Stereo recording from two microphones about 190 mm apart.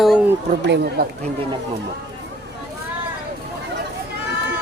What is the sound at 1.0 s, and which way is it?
Speech, 55° right (ahead or behind).